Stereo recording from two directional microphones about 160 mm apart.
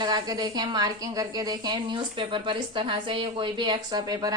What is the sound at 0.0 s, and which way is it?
A woman's voice, 25° right (ahead or behind).